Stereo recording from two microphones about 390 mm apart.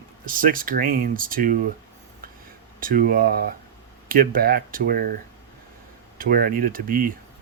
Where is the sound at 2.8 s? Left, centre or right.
Right.